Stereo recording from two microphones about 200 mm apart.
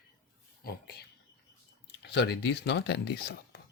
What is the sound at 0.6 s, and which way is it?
Speech, 55° left (ahead or behind).